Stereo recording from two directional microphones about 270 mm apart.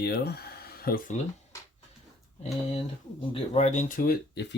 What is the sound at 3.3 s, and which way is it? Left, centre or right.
Speech, left.